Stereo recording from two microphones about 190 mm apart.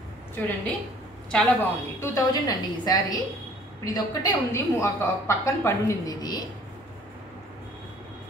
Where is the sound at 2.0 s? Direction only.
20° left (ahead or behind).